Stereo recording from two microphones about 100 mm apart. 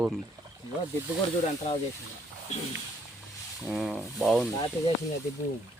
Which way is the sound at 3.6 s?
10° right (ahead or behind).